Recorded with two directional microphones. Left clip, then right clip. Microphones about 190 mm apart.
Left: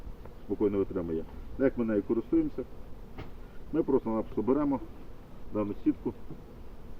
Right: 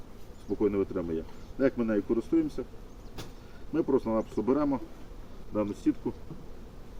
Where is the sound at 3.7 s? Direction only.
10° right (ahead or behind).